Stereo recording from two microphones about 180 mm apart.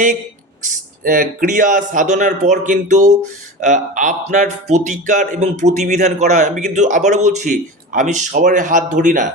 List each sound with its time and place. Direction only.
0.6 s speech: 45° right (ahead or behind)